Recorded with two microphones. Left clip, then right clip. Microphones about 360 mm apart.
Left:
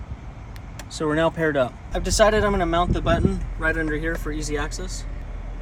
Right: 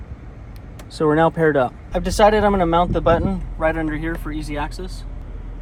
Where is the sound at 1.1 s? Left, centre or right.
Centre.